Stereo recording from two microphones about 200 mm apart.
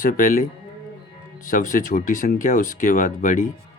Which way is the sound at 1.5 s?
40° left (ahead or behind).